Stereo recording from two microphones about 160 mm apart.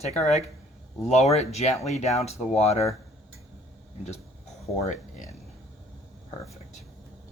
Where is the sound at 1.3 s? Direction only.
40° left (ahead or behind).